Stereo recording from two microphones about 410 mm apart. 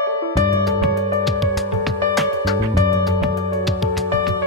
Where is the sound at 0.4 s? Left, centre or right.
Centre.